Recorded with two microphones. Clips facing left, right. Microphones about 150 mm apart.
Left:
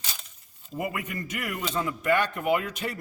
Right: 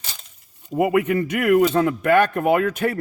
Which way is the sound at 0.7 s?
70° right (ahead or behind).